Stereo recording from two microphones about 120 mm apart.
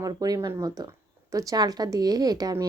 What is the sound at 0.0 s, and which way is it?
A woman's voice, 30° right (ahead or behind).